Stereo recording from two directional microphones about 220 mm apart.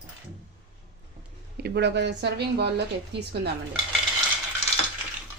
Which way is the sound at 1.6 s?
50° right (ahead or behind).